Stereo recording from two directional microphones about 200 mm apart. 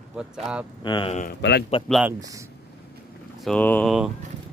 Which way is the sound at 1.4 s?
60° left (ahead or behind).